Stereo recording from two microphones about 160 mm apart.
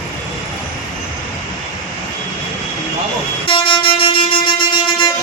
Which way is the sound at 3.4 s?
35° left (ahead or behind).